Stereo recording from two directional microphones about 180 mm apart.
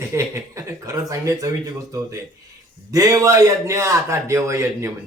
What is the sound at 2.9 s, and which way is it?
A man's voice, 20° right (ahead or behind).